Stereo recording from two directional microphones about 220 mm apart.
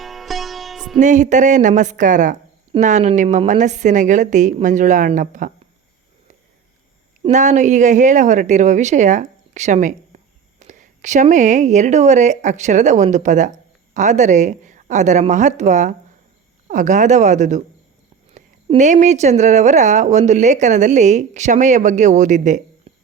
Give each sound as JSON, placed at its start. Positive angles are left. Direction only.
{"t": 0.0, "sound": "music", "side_deg": 0}
{"t": 0.9, "sound": "speech", "side_deg": -35}
{"t": 7.2, "sound": "speech", "side_deg": -35}